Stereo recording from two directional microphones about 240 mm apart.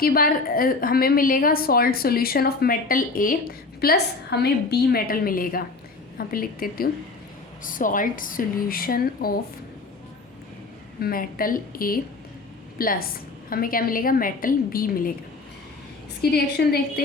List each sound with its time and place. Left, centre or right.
0.0 s a woman's voice: left
11.0 s a woman's voice: left
16.3 s a woman's voice: left